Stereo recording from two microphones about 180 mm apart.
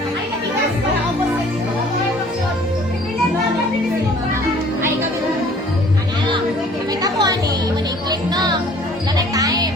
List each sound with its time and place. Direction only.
7.0 s music: 20° right (ahead or behind)